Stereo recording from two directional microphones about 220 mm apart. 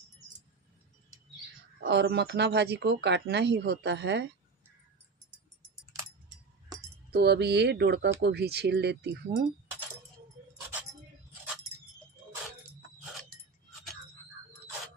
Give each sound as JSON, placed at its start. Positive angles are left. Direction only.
{"t": 1.8, "sound": "speech", "side_deg": -50}
{"t": 7.1, "sound": "speech", "side_deg": -50}